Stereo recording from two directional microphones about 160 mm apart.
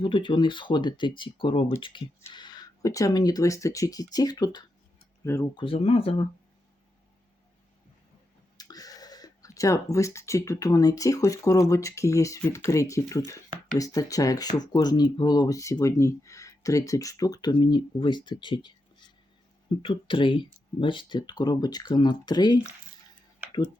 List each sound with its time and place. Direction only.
0.0 s speech: 30° left (ahead or behind)
5.5 s speech: 35° left (ahead or behind)
8.5 s speech: 25° left (ahead or behind)